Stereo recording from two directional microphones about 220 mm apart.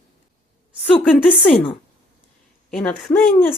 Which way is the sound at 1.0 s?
5° left (ahead or behind).